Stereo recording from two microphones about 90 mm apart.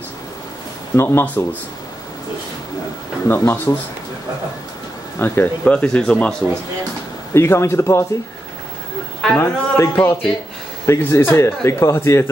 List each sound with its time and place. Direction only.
0.9 s a man's voice: 25° left (ahead or behind)
3.3 s a man's voice: 25° left (ahead or behind)
5.2 s a man's voice: 25° left (ahead or behind)
5.6 s speech: 10° left (ahead or behind)
7.3 s a man's voice: 30° left (ahead or behind)
9.4 s a man's voice: 25° left (ahead or behind)